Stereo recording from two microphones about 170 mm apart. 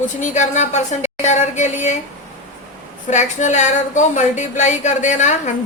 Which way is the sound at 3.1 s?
45° left (ahead or behind).